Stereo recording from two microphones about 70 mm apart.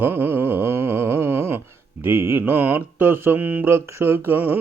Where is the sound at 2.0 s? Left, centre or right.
Right.